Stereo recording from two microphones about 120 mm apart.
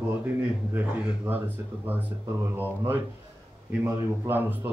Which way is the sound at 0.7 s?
15° right (ahead or behind).